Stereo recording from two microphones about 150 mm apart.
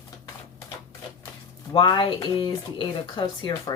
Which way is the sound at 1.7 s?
30° left (ahead or behind).